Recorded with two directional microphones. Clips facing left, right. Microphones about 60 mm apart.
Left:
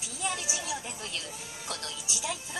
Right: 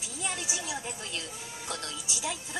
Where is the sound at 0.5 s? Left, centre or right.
Right.